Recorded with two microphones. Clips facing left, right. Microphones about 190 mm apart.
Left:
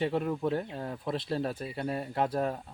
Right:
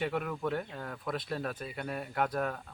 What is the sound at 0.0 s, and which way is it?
Speech, 30° left (ahead or behind).